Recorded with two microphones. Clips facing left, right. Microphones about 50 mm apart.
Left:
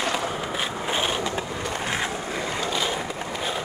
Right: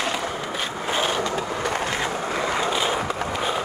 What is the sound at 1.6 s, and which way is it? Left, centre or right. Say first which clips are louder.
Skateboard: right 4 dB; right.